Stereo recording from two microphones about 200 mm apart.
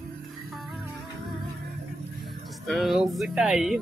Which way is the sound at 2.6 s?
Centre (ahead or behind).